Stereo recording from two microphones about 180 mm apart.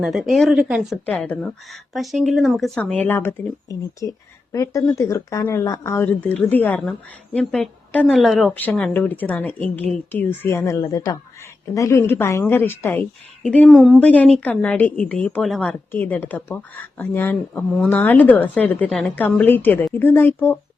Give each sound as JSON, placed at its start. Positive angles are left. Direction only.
{"t": 0.0, "sound": "speech", "side_deg": 0}
{"t": 1.0, "sound": "a woman's voice", "side_deg": 10}